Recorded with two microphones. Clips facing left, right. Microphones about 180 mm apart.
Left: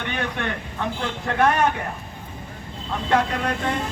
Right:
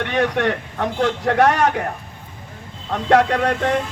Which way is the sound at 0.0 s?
85° right.